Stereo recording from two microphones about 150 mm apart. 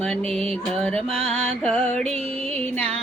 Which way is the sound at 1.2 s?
45° right (ahead or behind).